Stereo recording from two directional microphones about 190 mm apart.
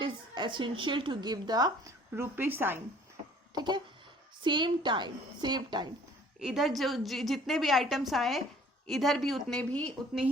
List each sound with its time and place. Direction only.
0.0 s a woman's voice: 25° right (ahead or behind)
3.5 s a sound: 25° right (ahead or behind)
4.4 s a woman's voice: 25° right (ahead or behind)
6.4 s a woman's voice: centre (ahead or behind)